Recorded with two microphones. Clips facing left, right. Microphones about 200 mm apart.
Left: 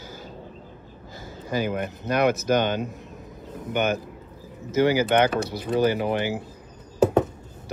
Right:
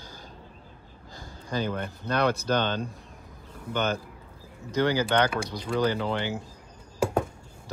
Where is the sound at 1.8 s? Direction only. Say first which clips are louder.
Left 4 dB; 10° left (ahead or behind).